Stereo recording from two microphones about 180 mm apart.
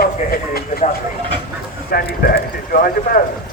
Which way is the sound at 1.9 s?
60° left (ahead or behind).